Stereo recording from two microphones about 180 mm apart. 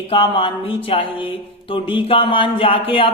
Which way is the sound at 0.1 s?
30° left (ahead or behind).